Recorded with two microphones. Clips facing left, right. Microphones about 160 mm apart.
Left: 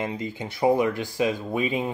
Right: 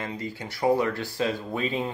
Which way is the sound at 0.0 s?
20° left (ahead or behind).